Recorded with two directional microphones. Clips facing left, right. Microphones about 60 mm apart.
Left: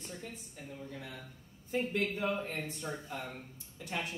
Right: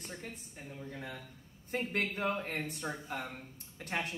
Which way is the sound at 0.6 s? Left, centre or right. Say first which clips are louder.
Left 2 dB; right.